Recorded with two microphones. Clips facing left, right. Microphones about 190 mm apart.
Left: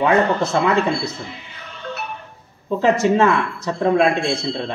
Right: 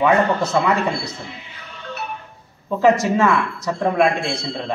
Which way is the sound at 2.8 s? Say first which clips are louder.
Even; 30° left (ahead or behind).